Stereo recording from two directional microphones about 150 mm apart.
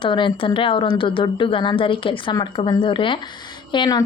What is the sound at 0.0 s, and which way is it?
Speech, 35° left (ahead or behind).